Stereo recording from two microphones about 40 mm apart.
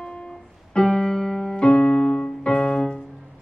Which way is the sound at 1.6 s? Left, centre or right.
Left.